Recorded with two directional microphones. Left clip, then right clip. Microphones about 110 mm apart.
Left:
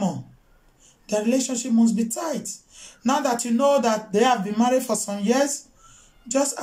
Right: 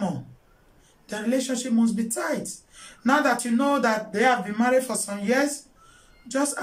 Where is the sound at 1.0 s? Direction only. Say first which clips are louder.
Left 4 dB; 25° left (ahead or behind).